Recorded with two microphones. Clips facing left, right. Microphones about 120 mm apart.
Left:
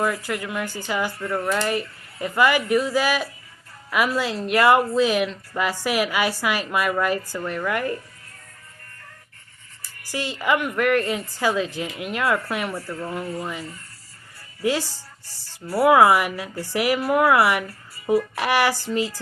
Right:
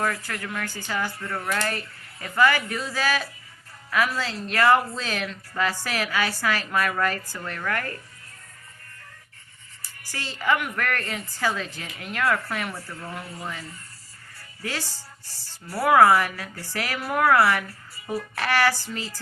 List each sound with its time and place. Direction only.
0.0 s a woman's voice: 15° left (ahead or behind)
10.1 s a woman's voice: 15° left (ahead or behind)